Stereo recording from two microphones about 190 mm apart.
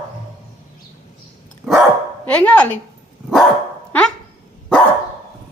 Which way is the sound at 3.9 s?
5° left (ahead or behind).